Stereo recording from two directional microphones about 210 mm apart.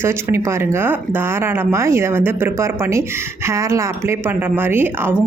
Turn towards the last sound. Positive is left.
turn(degrees=-10)  # may be behind; listen again after turning